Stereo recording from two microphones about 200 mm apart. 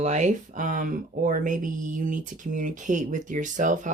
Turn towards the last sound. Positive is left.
turn(degrees=-40)  # may be behind; listen again after turning